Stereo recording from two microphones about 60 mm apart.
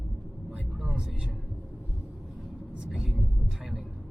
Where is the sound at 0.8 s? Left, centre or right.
Centre.